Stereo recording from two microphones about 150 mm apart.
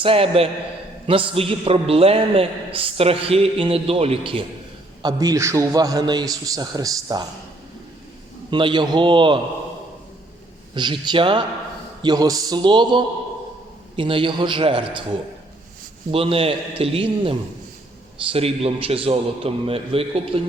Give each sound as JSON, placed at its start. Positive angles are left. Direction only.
{"t": 0.0, "sound": "a man's voice", "side_deg": -40}
{"t": 5.0, "sound": "a man's voice", "side_deg": -25}
{"t": 8.4, "sound": "a man's voice", "side_deg": -35}
{"t": 10.8, "sound": "a man's voice", "side_deg": -30}
{"t": 16.1, "sound": "a man's voice", "side_deg": -40}